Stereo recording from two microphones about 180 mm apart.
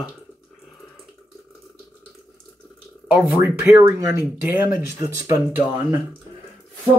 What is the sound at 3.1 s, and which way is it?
Speech, 10° right (ahead or behind).